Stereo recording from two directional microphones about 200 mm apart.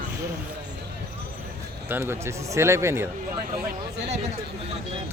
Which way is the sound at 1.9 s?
10° right (ahead or behind).